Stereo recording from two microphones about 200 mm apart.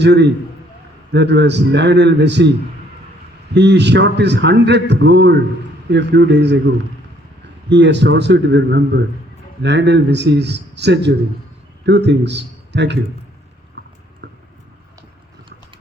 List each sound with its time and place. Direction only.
0.0 s a man's voice: 60° right (ahead or behind)
3.5 s a man's voice: 60° right (ahead or behind)